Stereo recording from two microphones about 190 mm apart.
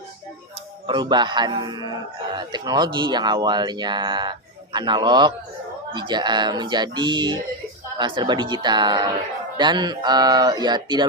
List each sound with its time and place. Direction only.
0.9 s speech: 25° right (ahead or behind)